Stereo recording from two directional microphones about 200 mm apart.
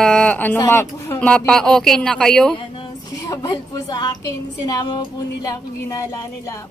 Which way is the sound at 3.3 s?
15° left (ahead or behind).